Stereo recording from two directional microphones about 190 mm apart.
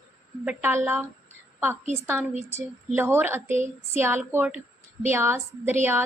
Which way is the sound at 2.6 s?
10° right (ahead or behind).